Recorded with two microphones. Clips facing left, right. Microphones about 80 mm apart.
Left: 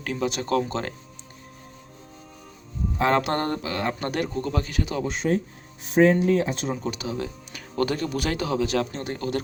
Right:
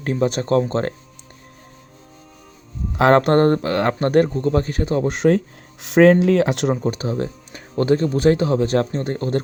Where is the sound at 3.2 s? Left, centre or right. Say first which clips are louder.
Right 10 dB; right.